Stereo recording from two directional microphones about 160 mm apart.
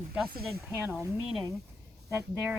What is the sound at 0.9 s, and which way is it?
Speech, 10° right (ahead or behind).